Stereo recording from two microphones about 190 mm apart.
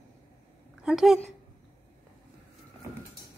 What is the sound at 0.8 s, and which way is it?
Speech, centre (ahead or behind).